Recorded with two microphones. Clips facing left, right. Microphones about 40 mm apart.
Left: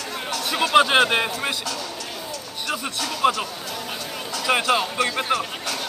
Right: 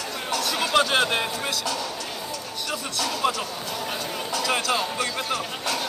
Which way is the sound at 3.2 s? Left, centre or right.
Left.